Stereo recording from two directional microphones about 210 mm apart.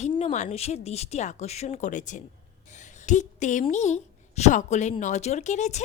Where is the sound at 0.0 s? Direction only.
30° left (ahead or behind).